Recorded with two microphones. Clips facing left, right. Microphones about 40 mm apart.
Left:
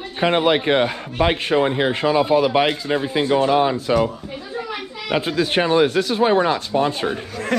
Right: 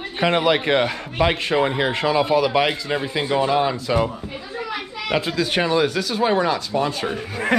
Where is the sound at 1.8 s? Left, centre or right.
Right.